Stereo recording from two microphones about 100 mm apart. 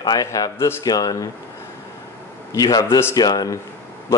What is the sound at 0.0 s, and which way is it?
Speech, 40° left (ahead or behind).